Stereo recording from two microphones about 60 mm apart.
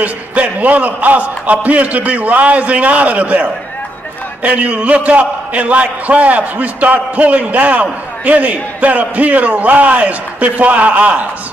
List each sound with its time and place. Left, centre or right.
0.0 s a man's voice: right